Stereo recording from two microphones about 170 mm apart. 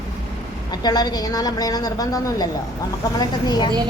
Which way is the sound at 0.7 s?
25° left (ahead or behind).